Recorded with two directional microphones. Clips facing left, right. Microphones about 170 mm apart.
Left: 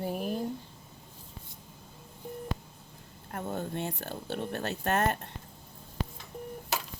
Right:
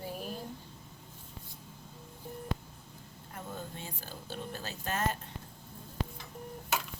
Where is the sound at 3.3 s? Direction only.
65° left (ahead or behind).